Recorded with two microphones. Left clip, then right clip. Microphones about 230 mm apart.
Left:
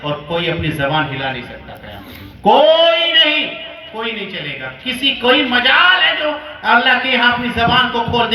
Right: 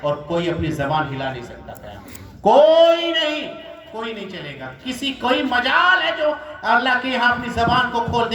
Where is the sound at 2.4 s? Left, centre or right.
Right.